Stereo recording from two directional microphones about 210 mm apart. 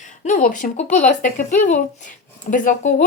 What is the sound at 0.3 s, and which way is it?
Speech, 35° left (ahead or behind).